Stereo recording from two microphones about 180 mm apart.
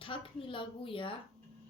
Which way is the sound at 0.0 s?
30° left (ahead or behind).